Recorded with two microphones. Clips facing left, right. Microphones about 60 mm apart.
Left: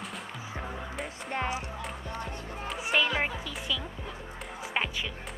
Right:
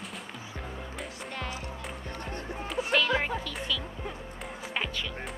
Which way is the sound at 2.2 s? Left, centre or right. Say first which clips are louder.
Right 2 dB; right.